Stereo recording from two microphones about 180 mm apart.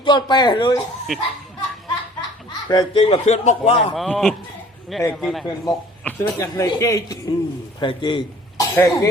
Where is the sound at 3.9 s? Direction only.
5° left (ahead or behind).